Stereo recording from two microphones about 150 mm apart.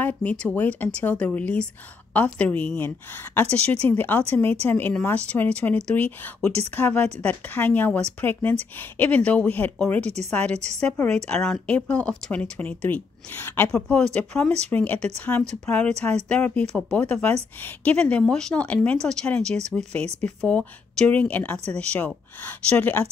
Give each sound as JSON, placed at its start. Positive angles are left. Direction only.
{"t": 0.0, "sound": "speech", "side_deg": 10}
{"t": 3.9, "sound": "speech", "side_deg": 15}
{"t": 10.5, "sound": "a woman's voice", "side_deg": -50}
{"t": 10.8, "sound": "speech", "side_deg": 10}